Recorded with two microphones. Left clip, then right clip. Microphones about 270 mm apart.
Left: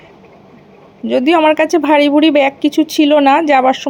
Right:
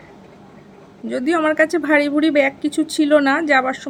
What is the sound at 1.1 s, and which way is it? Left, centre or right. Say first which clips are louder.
Speech: left 8 dB; centre.